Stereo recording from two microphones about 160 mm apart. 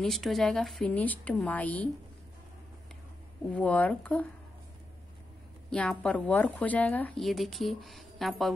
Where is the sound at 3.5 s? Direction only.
10° left (ahead or behind).